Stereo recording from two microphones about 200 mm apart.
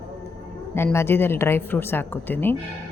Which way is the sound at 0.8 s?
10° left (ahead or behind).